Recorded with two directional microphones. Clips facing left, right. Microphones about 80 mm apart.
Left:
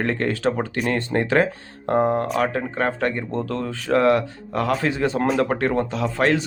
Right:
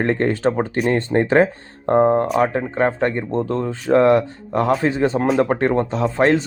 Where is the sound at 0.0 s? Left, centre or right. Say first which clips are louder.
Right 4 dB; right.